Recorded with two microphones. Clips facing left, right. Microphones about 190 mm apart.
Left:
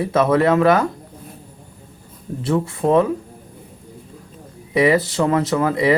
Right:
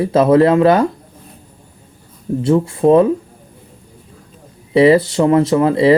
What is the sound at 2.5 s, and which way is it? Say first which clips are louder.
Speech: right 6 dB; 30° right (ahead or behind).